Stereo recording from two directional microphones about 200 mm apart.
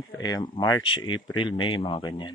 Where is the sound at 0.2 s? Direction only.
20° left (ahead or behind).